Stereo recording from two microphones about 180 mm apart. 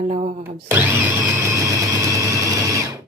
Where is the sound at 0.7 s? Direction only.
10° right (ahead or behind).